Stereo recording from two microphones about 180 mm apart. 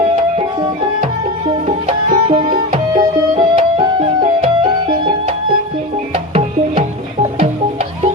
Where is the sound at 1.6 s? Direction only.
35° right (ahead or behind).